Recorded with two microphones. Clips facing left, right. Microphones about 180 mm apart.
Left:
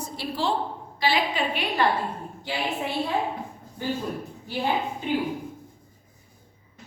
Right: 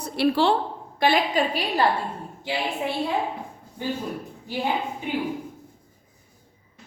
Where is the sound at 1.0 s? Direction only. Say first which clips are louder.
Right 4 dB; 45° right (ahead or behind).